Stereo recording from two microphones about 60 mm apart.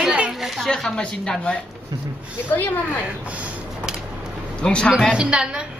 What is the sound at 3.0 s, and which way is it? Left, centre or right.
Speech, right.